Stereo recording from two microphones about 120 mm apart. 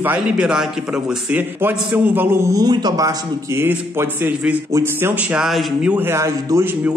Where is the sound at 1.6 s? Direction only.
15° right (ahead or behind).